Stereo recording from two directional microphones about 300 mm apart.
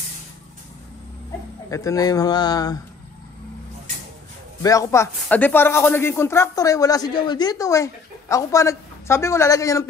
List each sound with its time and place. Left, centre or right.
1.7 s speech: centre
4.6 s speech: centre